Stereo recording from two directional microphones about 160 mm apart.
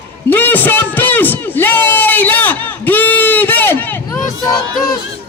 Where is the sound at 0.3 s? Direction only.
10° left (ahead or behind).